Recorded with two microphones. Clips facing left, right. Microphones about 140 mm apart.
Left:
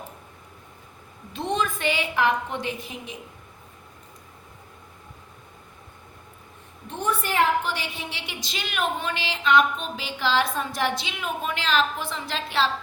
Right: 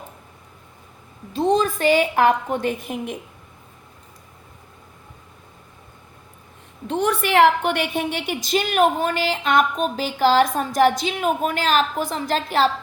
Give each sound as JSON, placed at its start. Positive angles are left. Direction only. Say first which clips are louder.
{"t": 1.3, "sound": "a woman's voice", "louder": "right 8 dB", "side_deg": -35}
{"t": 6.8, "sound": "a woman's voice", "louder": "right 6 dB", "side_deg": -90}